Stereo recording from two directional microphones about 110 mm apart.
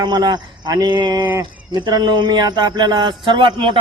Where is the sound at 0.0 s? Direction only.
40° right (ahead or behind).